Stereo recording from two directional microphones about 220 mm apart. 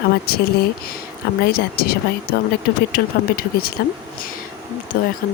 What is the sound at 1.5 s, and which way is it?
Speech, 45° left (ahead or behind).